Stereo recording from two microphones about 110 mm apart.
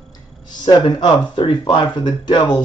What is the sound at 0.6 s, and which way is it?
A woman's voice, 45° left (ahead or behind).